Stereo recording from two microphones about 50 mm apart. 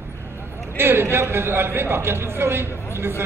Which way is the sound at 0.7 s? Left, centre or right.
Right.